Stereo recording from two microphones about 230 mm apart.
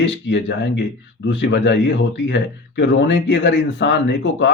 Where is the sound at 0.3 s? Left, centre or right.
Left.